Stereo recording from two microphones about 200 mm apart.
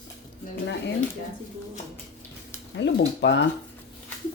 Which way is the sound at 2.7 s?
60° left (ahead or behind).